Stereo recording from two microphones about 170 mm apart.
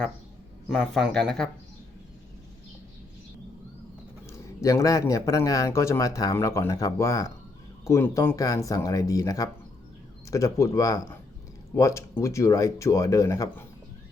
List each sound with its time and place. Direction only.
0.9 s speech: centre (ahead or behind)
4.3 s a man's voice: 20° left (ahead or behind)